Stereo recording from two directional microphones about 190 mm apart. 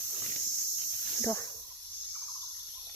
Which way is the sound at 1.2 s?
15° left (ahead or behind).